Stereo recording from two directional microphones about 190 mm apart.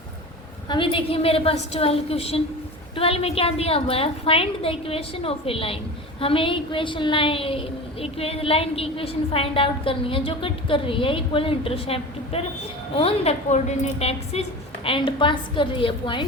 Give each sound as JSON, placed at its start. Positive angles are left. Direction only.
{"t": 0.7, "sound": "a woman's voice", "side_deg": 25}